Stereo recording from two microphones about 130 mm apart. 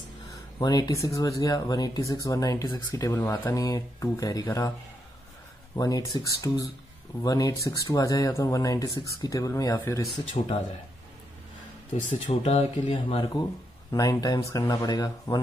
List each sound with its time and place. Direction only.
0.3 s speech: 30° left (ahead or behind)
5.8 s speech: 25° left (ahead or behind)
10.4 s speech: 55° left (ahead or behind)
12.1 s speech: 45° left (ahead or behind)
12.9 s speech: 35° left (ahead or behind)